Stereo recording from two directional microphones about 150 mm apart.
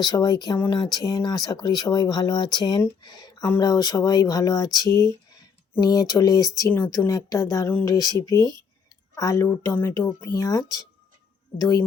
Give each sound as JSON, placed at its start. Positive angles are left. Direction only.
{"t": 0.0, "sound": "speech", "side_deg": 25}